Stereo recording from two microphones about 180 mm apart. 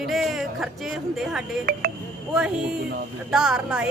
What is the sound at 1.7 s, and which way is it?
Speech, 55° right (ahead or behind).